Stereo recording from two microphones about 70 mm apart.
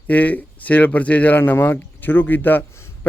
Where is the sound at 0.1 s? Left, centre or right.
Left.